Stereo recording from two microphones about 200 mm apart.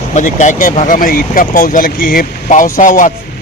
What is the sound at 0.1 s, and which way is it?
A man's voice, 35° left (ahead or behind).